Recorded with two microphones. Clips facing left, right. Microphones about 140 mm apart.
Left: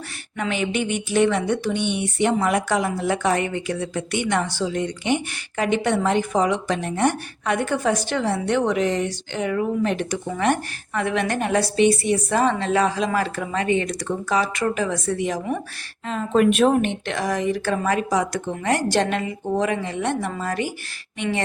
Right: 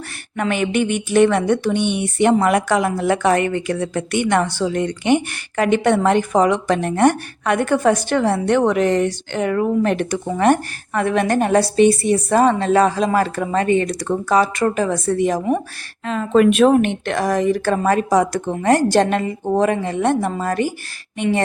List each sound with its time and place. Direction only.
0.3 s speech: 55° right (ahead or behind)
10.2 s a woman's voice: 40° right (ahead or behind)
16.0 s speech: 90° right; by 20.7 s 45° right (ahead or behind)